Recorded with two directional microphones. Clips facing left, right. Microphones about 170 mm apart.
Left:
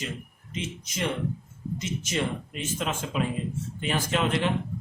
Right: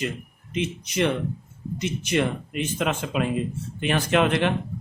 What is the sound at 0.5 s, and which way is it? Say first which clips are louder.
A man's voice: right 8 dB; 65° right (ahead or behind).